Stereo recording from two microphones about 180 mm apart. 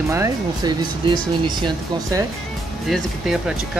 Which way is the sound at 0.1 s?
15° right (ahead or behind).